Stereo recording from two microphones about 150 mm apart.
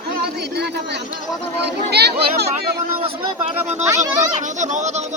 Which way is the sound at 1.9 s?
90° right.